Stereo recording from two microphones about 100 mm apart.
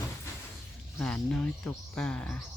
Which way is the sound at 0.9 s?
10° left (ahead or behind).